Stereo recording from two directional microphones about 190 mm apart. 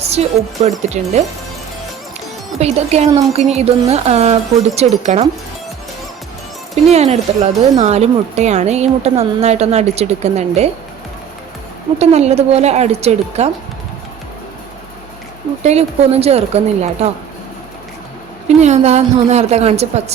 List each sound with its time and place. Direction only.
0.2 s speech: 35° right (ahead or behind)
2.6 s speech: 35° right (ahead or behind)
6.8 s speech: 35° right (ahead or behind)
11.9 s speech: 35° right (ahead or behind)
15.6 s speech: 35° right (ahead or behind)
18.4 s speech: 35° right (ahead or behind)